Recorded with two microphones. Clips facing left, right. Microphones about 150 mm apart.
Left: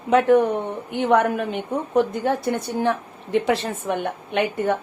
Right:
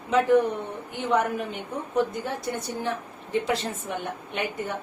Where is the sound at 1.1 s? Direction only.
75° left (ahead or behind).